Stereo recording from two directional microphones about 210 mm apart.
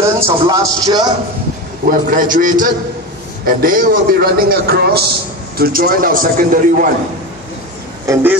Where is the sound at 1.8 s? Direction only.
40° right (ahead or behind).